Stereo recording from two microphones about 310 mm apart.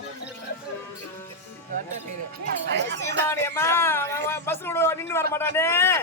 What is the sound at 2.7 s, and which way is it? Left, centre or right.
Speech, right.